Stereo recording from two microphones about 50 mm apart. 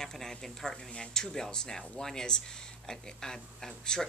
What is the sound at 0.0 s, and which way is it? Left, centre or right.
Speech, centre.